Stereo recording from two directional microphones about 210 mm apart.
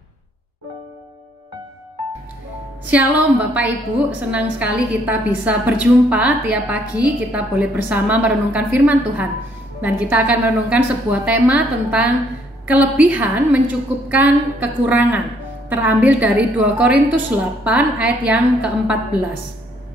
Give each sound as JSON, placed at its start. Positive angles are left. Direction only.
{"t": 3.5, "sound": "a woman's voice", "side_deg": -10}